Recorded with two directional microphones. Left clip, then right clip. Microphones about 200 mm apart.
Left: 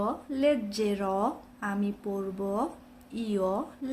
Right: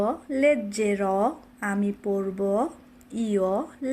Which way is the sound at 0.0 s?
20° right (ahead or behind).